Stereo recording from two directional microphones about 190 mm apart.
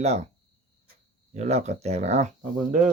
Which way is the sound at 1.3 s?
35° right (ahead or behind).